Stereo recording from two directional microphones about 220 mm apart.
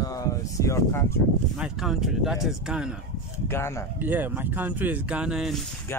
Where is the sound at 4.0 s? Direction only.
10° right (ahead or behind).